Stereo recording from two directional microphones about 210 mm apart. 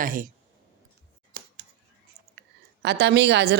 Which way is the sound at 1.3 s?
45° right (ahead or behind).